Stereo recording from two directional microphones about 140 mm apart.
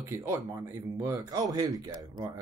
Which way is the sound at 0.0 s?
20° right (ahead or behind).